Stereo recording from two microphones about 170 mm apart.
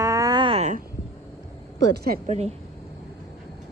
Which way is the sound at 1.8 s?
65° right (ahead or behind).